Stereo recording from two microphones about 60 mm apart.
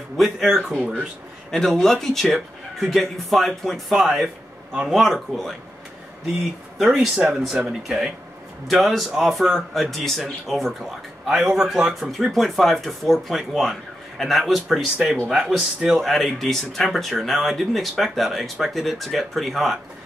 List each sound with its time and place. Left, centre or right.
0.2 s speech: centre
0.7 s speech: right
1.5 s speech: centre
6.8 s speech: centre
7.5 s speech: centre
8.6 s speech: centre
11.2 s speech: centre